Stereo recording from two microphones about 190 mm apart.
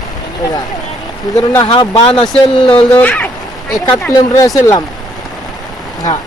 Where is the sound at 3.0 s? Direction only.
5° left (ahead or behind).